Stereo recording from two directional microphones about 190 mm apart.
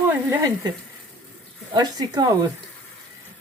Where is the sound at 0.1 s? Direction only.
15° right (ahead or behind).